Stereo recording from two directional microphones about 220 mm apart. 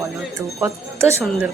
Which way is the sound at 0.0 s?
10° right (ahead or behind).